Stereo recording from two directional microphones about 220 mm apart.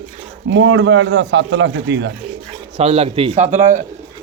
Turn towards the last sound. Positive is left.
turn(degrees=-35)  # may be behind; listen again after turning